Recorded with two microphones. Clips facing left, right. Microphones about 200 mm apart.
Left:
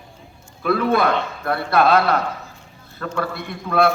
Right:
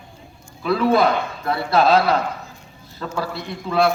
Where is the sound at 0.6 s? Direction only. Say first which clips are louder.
Right 1 dB; 55° left (ahead or behind).